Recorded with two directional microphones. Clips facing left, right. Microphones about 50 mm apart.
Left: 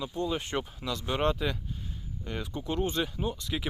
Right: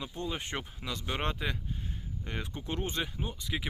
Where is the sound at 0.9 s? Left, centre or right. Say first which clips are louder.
Left 6 dB; right.